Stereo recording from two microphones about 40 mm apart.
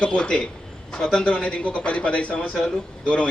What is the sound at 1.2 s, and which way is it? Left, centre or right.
A man's voice, left.